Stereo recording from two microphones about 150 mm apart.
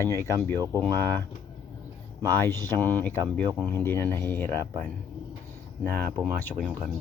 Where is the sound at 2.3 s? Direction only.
15° left (ahead or behind).